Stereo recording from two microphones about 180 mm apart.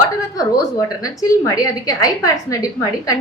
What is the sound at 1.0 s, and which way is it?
A woman's voice, 20° left (ahead or behind).